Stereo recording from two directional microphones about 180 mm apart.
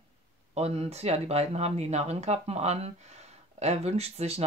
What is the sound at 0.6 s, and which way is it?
Speech, 35° right (ahead or behind).